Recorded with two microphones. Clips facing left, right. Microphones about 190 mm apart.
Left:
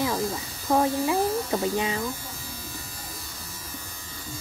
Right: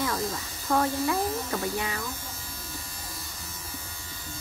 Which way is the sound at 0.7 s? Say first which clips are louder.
Left 3 dB; 20° left (ahead or behind).